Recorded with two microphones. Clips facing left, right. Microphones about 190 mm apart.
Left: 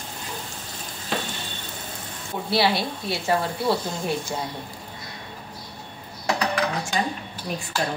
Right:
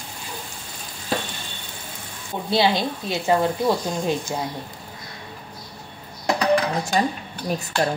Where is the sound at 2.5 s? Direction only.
20° right (ahead or behind).